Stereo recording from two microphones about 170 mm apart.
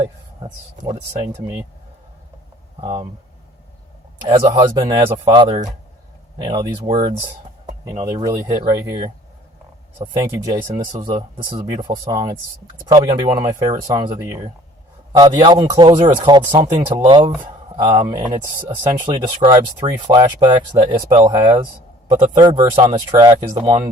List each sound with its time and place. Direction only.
1.3 s speech: 15° right (ahead or behind)
4.2 s speech: 25° right (ahead or behind)
10.2 s speech: 20° right (ahead or behind)